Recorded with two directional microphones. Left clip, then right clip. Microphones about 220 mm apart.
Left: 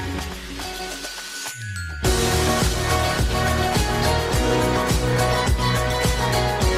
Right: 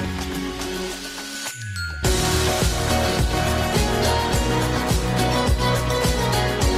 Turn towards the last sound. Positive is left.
turn(degrees=0)  # may be behind; listen again after turning